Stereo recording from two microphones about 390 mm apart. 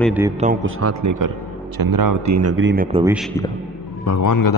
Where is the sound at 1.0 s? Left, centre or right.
Right.